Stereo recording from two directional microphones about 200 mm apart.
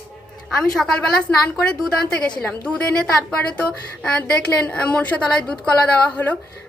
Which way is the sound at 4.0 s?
5° left (ahead or behind).